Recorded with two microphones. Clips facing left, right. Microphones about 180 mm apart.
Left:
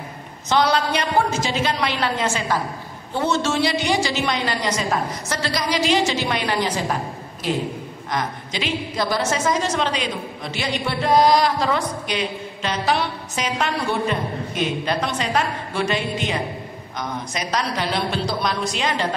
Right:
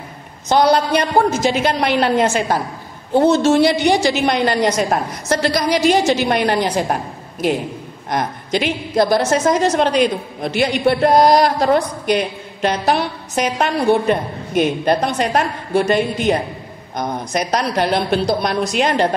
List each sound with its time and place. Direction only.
0.5 s a woman's voice: 45° right (ahead or behind)
1.4 s a woman's voice: 55° right (ahead or behind)
8.1 s a woman's voice: 55° right (ahead or behind)
17.3 s a woman's voice: 55° right (ahead or behind)